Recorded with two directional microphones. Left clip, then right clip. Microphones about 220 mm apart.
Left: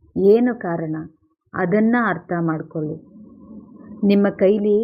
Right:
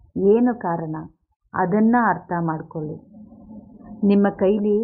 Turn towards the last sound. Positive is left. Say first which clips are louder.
# left 3 dB
turn(degrees=5)  # may be behind; listen again after turning